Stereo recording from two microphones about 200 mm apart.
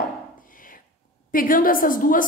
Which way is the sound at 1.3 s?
45° left (ahead or behind).